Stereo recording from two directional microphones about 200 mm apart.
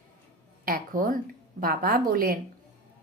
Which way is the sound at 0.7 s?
45° right (ahead or behind).